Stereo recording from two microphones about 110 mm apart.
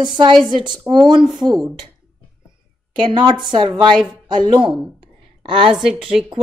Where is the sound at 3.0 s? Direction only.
45° right (ahead or behind).